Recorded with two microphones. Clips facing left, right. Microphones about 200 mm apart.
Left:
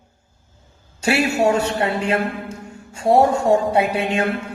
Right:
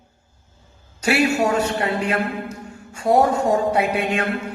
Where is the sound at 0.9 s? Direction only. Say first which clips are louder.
Even; 30° left (ahead or behind).